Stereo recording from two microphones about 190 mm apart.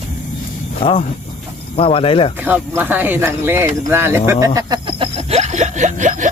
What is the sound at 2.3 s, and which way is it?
Speech, 10° right (ahead or behind).